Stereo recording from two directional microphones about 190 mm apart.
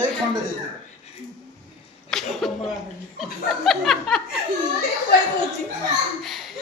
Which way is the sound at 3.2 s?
Centre (ahead or behind).